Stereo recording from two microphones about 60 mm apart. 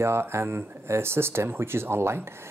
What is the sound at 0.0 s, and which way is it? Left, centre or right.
Speech, right.